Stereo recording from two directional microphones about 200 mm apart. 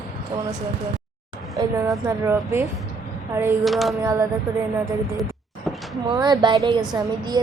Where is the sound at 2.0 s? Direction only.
15° right (ahead or behind).